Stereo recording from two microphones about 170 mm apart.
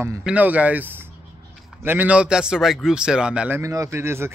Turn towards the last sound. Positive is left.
turn(degrees=-15)  # may be behind; listen again after turning